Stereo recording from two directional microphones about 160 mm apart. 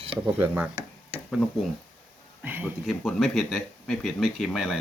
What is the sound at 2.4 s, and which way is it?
Speech, 10° right (ahead or behind).